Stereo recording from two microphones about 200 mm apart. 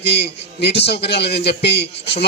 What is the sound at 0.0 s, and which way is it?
A man's voice, 60° left (ahead or behind).